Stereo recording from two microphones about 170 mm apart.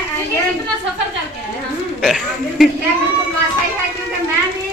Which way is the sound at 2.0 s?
Centre (ahead or behind).